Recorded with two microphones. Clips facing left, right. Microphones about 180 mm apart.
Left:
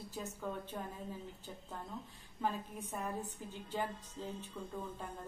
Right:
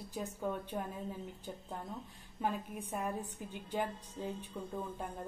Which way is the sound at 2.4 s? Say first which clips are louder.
Right 1 dB; 15° right (ahead or behind).